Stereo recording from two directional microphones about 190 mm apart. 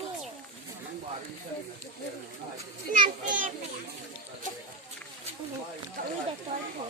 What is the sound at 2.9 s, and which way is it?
Speech, 45° right (ahead or behind).